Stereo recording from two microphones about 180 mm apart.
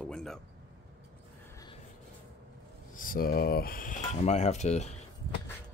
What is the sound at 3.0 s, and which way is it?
Speech, 55° left (ahead or behind).